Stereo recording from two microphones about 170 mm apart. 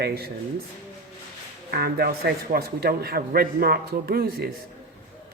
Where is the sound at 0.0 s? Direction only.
65° right (ahead or behind).